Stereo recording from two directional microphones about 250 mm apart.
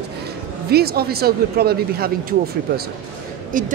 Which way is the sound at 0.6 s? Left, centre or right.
Right.